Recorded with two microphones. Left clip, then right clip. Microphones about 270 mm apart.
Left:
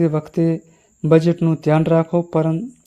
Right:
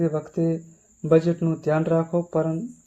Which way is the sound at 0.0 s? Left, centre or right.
Left.